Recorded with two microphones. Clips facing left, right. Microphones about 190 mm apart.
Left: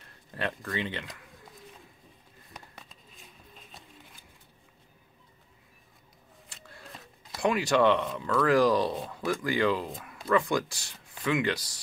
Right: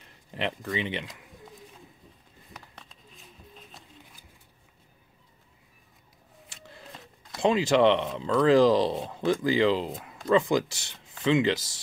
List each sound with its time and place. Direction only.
0.3 s speech: 15° right (ahead or behind)
2.5 s a sound: 5° left (ahead or behind)
7.3 s speech: 25° right (ahead or behind)